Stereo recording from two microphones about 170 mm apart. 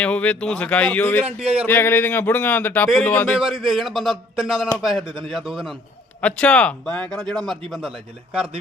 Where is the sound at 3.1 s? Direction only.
10° left (ahead or behind).